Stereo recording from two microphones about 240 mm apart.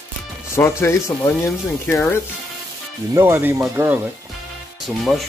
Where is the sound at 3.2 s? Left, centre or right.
Centre.